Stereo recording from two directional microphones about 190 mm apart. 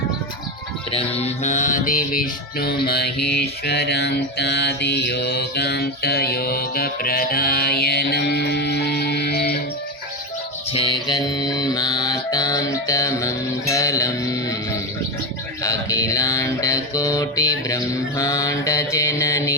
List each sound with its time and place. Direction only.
0.9 s music: 30° left (ahead or behind); by 9.6 s 55° left (ahead or behind)
10.7 s music: 25° left (ahead or behind)
15.6 s mantra: 15° left (ahead or behind)